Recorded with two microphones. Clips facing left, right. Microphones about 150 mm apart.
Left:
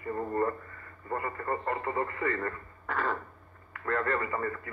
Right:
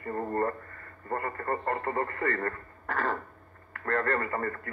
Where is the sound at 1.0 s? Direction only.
50° right (ahead or behind).